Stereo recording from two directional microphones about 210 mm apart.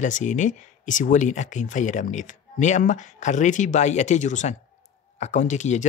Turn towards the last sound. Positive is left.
turn(degrees=35)  # may be behind; listen again after turning